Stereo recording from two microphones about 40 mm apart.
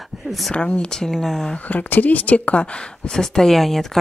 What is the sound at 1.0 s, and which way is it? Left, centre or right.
Speech, centre.